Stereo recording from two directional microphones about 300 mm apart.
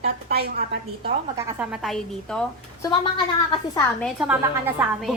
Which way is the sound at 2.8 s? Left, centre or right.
Centre.